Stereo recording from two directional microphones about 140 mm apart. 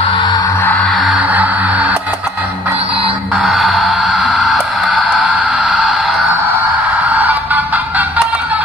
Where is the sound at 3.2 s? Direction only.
5° right (ahead or behind).